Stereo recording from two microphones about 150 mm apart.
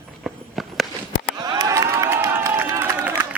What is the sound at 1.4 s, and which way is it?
Crowd, 25° right (ahead or behind).